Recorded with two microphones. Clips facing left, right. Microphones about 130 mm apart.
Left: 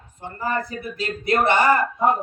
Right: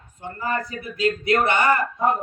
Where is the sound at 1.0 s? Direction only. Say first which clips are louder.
Right 1 dB; 30° left (ahead or behind).